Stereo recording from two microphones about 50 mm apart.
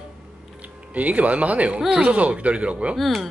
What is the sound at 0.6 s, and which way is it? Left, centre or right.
Speech, right.